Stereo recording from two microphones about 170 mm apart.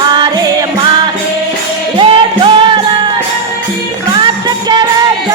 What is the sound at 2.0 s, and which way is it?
Music, 30° right (ahead or behind).